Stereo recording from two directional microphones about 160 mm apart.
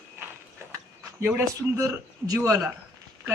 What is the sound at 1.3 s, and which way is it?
A man's voice, 15° right (ahead or behind).